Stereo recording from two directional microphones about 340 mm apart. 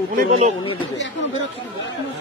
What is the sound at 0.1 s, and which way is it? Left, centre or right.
Speech, right.